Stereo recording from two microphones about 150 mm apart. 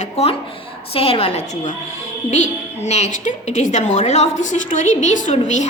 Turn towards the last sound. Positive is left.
turn(degrees=50)  # may be behind; listen again after turning